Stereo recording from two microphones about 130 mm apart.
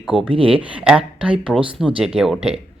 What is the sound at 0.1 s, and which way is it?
Speech, 5° right (ahead or behind).